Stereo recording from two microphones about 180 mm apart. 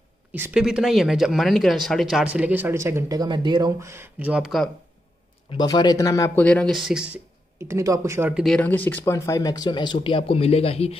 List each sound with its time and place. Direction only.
0.3 s speech: 10° right (ahead or behind)
5.5 s speech: 25° left (ahead or behind); by 7.2 s 5° right (ahead or behind)
7.6 s speech: 15° right (ahead or behind)
8.5 s speech: 10° left (ahead or behind); by 11.0 s 35° left (ahead or behind)